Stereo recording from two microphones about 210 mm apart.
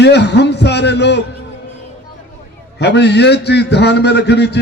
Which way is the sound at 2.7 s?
55° left (ahead or behind).